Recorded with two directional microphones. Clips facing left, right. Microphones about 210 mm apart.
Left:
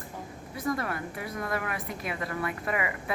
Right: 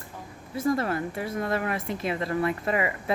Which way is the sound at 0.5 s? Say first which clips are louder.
Right 6 dB; 25° right (ahead or behind).